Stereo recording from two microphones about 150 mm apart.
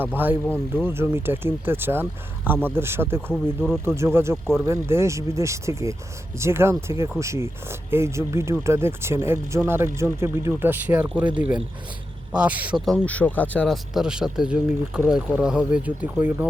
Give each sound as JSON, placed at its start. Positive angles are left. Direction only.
{"t": 0.0, "sound": "speech", "side_deg": -10}
{"t": 3.3, "sound": "speech", "side_deg": 5}
{"t": 3.8, "sound": "speech", "side_deg": -15}
{"t": 12.8, "sound": "speech", "side_deg": 5}
{"t": 13.9, "sound": "speech", "side_deg": -5}